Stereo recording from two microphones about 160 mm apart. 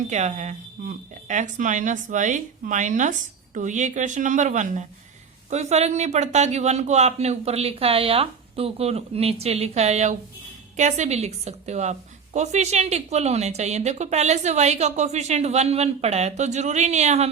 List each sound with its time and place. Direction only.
0.1 s a woman's voice: 45° right (ahead or behind)